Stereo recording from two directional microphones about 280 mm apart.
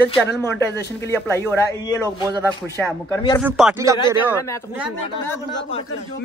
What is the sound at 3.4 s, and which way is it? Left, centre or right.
Speech, centre.